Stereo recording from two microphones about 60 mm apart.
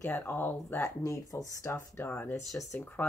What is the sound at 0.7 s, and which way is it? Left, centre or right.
Speech, left.